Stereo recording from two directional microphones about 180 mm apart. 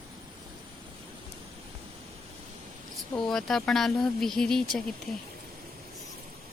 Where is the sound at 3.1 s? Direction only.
Centre (ahead or behind).